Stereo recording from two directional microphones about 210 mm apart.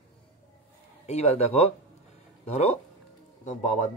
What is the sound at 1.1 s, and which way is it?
A man's voice, 30° left (ahead or behind).